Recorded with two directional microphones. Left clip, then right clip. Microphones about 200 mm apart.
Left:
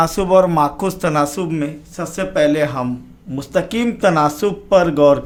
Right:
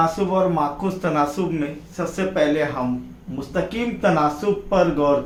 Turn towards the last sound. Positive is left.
turn(degrees=50)  # may be behind; listen again after turning